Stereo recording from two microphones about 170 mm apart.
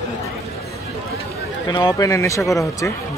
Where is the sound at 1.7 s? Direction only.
25° left (ahead or behind).